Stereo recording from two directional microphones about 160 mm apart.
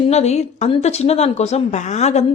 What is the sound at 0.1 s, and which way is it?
A woman's voice, 45° left (ahead or behind).